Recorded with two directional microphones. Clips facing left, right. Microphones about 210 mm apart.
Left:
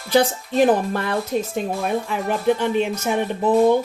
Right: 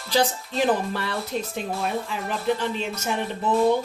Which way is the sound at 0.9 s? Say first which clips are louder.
Left 6 dB; 50° left (ahead or behind).